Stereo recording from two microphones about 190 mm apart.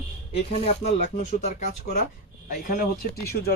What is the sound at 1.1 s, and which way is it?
Speech, 40° left (ahead or behind).